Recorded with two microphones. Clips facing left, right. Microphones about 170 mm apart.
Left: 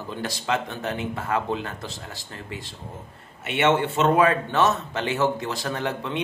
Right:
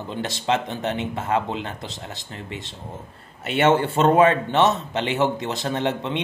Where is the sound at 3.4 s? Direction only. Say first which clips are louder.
Right 3 dB; 35° right (ahead or behind).